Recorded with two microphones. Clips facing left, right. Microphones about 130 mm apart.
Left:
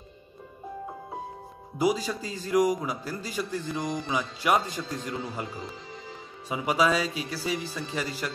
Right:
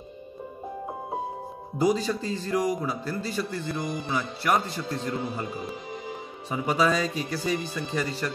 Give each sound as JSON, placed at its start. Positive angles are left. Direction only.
{"t": 1.8, "sound": "a man's voice", "side_deg": 10}
{"t": 5.5, "sound": "music", "side_deg": -15}
{"t": 6.5, "sound": "a man's voice", "side_deg": 10}